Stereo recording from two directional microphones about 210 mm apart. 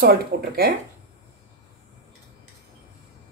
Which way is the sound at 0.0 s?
45° right (ahead or behind).